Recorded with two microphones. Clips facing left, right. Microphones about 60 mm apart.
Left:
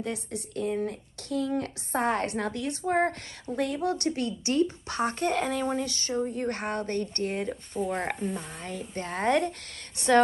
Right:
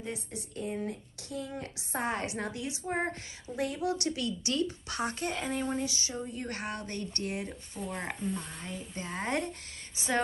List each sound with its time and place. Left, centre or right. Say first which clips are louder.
0.0 s a woman's voice: left 6 dB; left
5.3 s a woman's voice: left 5 dB; left
7.9 s a woman's voice: left 1 dB; left